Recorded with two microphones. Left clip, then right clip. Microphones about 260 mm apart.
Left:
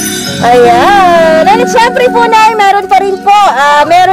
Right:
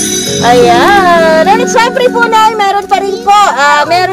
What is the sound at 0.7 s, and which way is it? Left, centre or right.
Speech, left.